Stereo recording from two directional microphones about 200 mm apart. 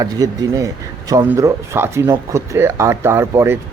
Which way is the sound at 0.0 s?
15° right (ahead or behind).